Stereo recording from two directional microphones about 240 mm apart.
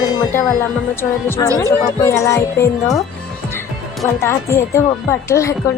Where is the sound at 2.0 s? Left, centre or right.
Centre.